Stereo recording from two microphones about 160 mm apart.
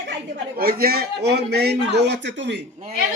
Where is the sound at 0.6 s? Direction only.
70° right (ahead or behind); by 2.5 s 90° right.